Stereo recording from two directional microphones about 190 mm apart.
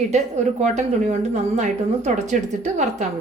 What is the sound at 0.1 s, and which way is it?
A woman's voice, 40° right (ahead or behind).